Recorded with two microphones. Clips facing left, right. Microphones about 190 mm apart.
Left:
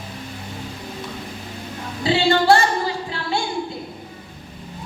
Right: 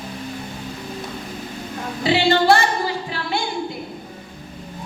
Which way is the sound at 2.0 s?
20° right (ahead or behind).